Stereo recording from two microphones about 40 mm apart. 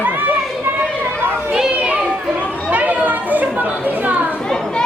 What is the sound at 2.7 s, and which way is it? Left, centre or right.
Chatter, right.